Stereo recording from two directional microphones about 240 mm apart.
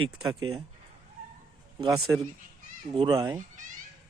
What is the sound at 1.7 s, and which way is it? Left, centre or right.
Speech, centre.